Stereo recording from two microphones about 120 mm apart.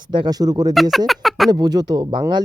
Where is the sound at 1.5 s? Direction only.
35° right (ahead or behind).